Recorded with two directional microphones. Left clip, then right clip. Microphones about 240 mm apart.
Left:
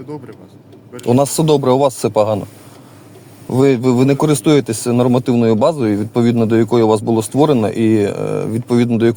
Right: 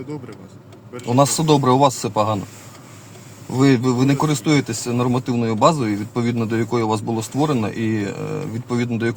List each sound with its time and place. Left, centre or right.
0.1 s speech: centre
0.9 s speech: left
3.5 s speech: left